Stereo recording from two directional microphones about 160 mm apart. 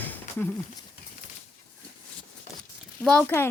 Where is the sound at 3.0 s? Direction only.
10° left (ahead or behind).